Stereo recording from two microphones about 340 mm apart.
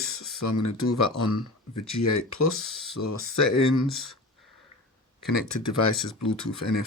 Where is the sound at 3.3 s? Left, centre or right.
Left.